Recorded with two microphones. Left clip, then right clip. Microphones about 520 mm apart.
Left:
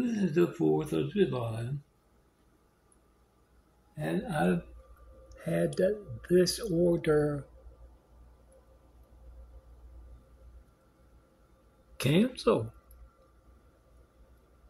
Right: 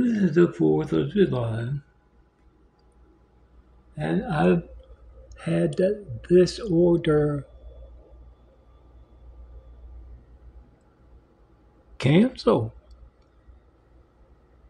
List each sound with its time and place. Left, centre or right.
0.0 s speech: left
3.9 s speech: left
12.0 s speech: left